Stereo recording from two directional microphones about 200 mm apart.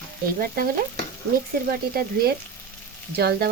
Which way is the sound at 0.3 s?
50° right (ahead or behind).